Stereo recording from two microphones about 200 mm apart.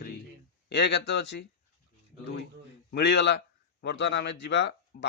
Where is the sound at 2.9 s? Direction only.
55° left (ahead or behind).